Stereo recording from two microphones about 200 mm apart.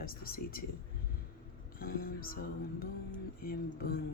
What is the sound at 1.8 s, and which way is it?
Speech, 45° left (ahead or behind).